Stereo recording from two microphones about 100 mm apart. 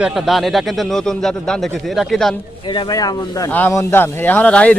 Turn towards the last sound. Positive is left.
turn(degrees=15)  # may be behind; listen again after turning